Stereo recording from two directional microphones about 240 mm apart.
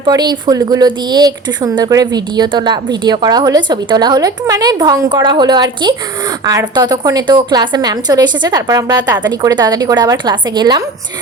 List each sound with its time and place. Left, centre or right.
0.0 s speech: centre